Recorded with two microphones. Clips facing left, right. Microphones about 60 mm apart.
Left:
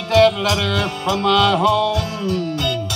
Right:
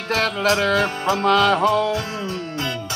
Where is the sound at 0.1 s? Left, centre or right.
Right.